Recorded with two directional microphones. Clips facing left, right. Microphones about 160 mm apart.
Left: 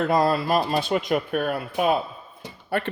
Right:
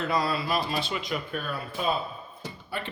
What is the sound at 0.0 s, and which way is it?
Speech, 50° left (ahead or behind).